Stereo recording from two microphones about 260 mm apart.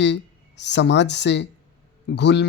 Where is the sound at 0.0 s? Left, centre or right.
Left.